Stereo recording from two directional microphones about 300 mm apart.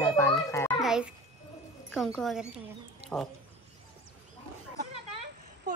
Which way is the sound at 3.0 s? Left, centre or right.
Right.